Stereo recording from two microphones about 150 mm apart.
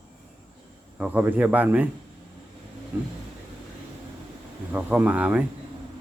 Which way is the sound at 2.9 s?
10° right (ahead or behind).